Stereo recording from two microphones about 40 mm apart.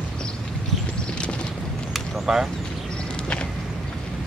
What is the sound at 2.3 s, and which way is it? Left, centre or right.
Speech, centre.